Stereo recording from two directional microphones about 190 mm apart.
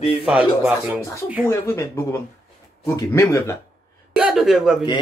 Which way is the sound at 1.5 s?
15° left (ahead or behind).